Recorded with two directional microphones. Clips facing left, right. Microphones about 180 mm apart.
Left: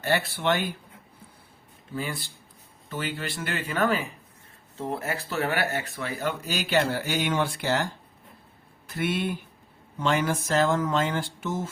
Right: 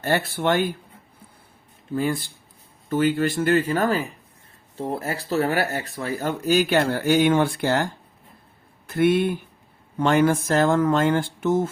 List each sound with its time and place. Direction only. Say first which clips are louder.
0.0 s speech: right 3 dB; 45° right (ahead or behind)
1.9 s speech: right 9 dB; 50° right (ahead or behind)
8.9 s speech: right 9 dB; 55° right (ahead or behind)